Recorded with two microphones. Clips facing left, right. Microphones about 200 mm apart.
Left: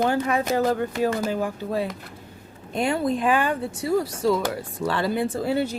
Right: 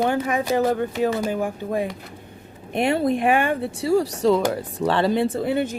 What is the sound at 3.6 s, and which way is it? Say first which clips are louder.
Speech: right 3 dB; 30° right (ahead or behind).